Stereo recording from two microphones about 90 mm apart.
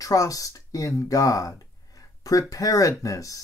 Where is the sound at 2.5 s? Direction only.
40° left (ahead or behind).